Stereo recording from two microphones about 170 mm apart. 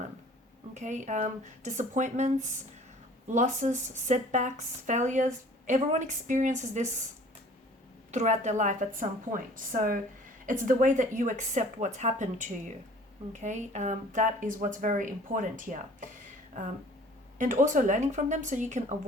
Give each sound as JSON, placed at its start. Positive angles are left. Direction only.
{"t": 0.7, "sound": "a woman's voice", "side_deg": -45}
{"t": 8.1, "sound": "a woman's voice", "side_deg": -45}
{"t": 17.3, "sound": "a woman's voice", "side_deg": -45}